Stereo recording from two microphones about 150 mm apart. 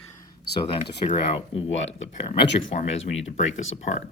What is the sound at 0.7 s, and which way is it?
Speech, 40° left (ahead or behind).